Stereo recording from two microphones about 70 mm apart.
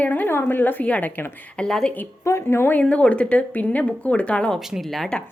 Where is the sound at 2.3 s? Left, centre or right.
Left.